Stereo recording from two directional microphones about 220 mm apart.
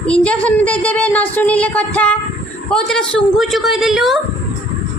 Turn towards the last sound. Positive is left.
turn(degrees=0)  # may be behind; listen again after turning